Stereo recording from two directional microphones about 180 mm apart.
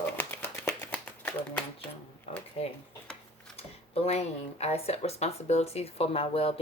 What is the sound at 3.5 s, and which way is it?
Speech, 35° left (ahead or behind).